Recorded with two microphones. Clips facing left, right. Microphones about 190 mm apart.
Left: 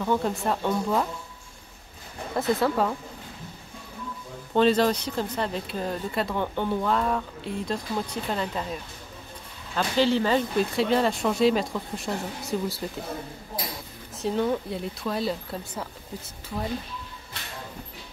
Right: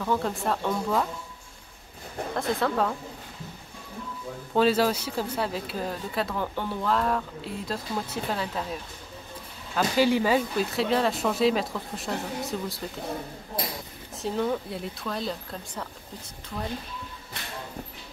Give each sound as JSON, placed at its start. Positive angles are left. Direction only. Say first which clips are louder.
{"t": 0.0, "sound": "speech", "louder": "left 2 dB", "side_deg": 0}
{"t": 2.3, "sound": "speech", "louder": "left 3 dB", "side_deg": 5}
{"t": 4.6, "sound": "speech", "louder": "left 2 dB", "side_deg": -5}
{"t": 9.8, "sound": "speech", "louder": "even", "side_deg": -10}
{"t": 14.1, "sound": "speech", "louder": "left 2 dB", "side_deg": 0}